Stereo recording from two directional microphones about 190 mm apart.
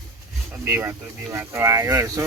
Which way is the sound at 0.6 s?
10° right (ahead or behind).